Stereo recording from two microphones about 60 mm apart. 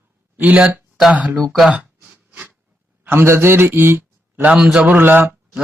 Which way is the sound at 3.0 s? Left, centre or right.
Right.